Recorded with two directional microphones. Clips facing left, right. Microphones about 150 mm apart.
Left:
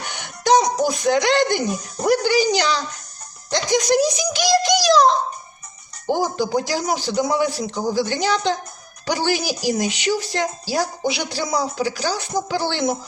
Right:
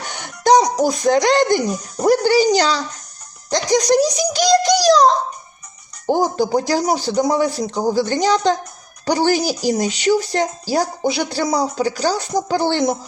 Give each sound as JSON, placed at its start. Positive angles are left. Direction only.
{"t": 0.1, "sound": "a child's voice", "side_deg": -40}